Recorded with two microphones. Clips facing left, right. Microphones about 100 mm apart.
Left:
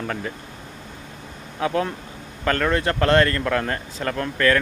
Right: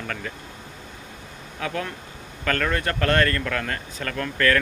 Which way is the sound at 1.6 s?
30° left (ahead or behind).